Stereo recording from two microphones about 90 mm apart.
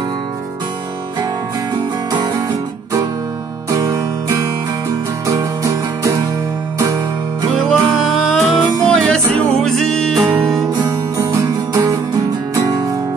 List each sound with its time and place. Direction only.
3.7 s music: 40° right (ahead or behind)
7.6 s music: 5° left (ahead or behind)
11.7 s music: 40° right (ahead or behind)